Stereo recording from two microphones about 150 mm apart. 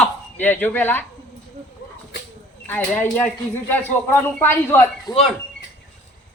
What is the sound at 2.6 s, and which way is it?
Speech, 10° left (ahead or behind).